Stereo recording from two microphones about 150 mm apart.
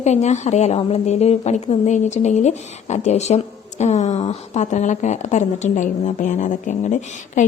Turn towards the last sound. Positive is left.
turn(degrees=55)  # may be behind; listen again after turning